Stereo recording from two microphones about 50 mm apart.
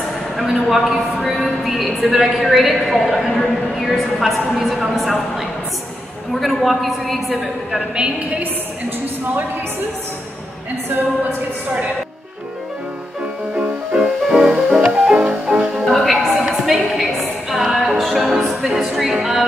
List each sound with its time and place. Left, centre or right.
0.4 s a woman's voice: centre
7.7 s a woman's voice: centre
13.6 s music: centre
15.8 s music: centre